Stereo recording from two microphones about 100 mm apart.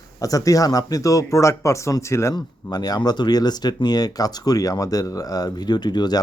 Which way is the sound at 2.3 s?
45° left (ahead or behind).